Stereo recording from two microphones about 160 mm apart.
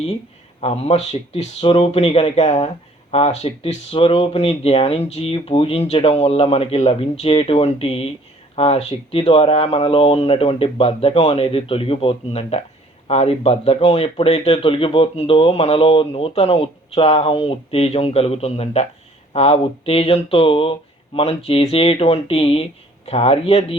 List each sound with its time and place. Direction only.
0.6 s speech: 40° left (ahead or behind)